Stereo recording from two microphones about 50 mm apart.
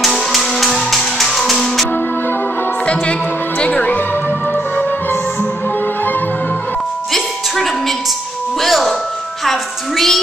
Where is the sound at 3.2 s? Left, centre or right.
Left.